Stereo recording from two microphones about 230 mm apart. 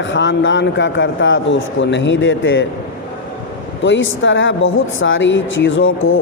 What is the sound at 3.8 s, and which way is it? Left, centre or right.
Speech, left.